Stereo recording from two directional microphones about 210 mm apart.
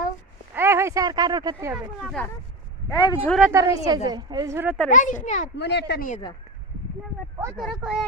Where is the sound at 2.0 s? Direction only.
Centre (ahead or behind).